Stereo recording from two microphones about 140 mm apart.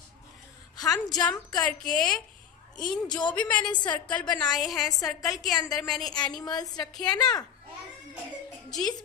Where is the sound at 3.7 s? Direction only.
30° left (ahead or behind).